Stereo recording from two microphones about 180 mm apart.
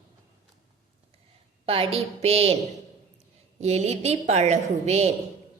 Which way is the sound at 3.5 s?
35° right (ahead or behind).